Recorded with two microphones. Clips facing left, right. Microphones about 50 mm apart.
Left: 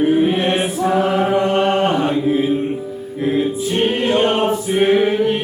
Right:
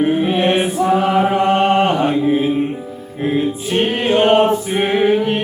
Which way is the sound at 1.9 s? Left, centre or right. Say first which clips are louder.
Right 1 dB; centre.